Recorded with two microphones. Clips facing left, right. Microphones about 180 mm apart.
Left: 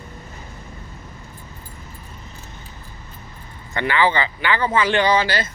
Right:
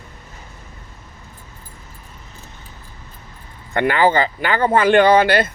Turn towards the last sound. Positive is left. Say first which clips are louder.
# right 6 dB
turn(degrees=-60)  # may be behind; listen again after turning